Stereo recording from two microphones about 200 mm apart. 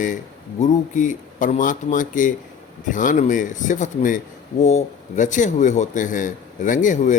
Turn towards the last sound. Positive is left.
turn(degrees=40)  # may be behind; listen again after turning